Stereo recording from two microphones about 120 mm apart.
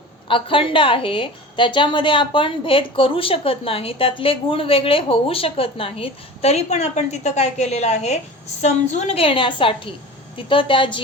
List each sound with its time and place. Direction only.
0.3 s a woman's voice: 45° left (ahead or behind)